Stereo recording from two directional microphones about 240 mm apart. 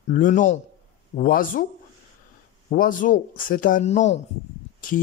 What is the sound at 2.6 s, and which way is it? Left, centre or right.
Speech, left.